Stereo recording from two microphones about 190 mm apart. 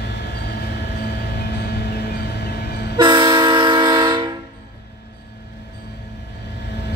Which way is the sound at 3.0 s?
25° right (ahead or behind).